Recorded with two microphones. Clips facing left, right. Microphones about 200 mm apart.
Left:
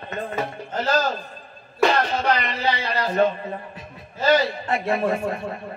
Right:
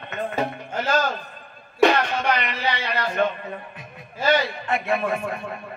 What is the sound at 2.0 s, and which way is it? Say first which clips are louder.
A man's voice: left 1 dB; 35° left (ahead or behind).